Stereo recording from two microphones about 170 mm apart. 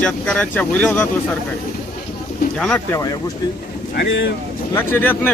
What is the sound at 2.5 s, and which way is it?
Speech, 5° left (ahead or behind).